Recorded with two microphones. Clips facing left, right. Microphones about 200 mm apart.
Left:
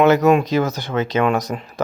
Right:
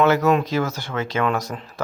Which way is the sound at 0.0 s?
15° left (ahead or behind).